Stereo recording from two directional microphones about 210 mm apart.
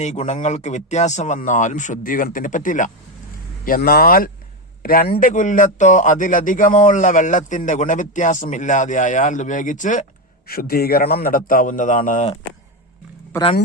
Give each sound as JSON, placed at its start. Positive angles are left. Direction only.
{"t": 0.0, "sound": "a man's voice", "side_deg": 30}